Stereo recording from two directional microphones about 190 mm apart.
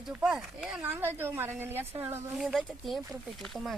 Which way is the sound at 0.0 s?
5° right (ahead or behind).